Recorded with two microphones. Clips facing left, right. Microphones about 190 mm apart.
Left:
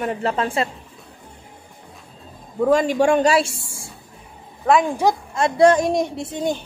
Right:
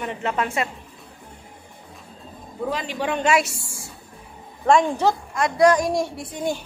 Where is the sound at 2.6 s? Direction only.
45° left (ahead or behind).